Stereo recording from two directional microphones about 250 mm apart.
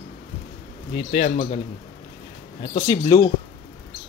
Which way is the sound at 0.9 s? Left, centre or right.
Left.